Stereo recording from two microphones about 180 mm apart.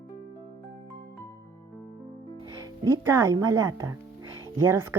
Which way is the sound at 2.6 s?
20° right (ahead or behind).